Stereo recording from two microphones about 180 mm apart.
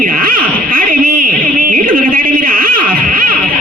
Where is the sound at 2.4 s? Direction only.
50° right (ahead or behind).